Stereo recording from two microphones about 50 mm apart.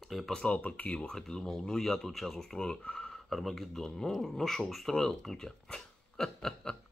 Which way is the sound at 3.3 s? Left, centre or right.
Centre.